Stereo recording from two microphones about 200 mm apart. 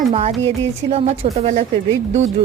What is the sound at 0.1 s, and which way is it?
Speech, 30° right (ahead or behind).